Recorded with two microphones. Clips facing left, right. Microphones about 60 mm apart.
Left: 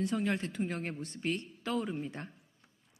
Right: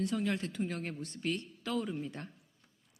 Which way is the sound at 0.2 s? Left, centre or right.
Left.